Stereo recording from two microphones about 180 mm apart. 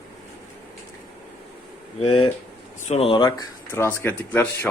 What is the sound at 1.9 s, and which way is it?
Speech, 30° left (ahead or behind).